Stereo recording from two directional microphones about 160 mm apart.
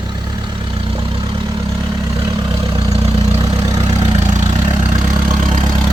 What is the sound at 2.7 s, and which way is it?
Vehicle, 35° right (ahead or behind).